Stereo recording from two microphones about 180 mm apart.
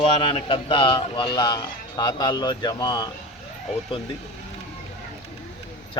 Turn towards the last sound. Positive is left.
turn(degrees=25)  # may be behind; listen again after turning